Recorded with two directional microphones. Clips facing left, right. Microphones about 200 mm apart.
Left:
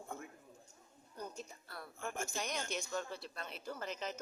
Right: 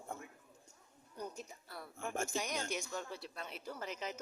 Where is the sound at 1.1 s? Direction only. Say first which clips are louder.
Right 1 dB; 10° right (ahead or behind).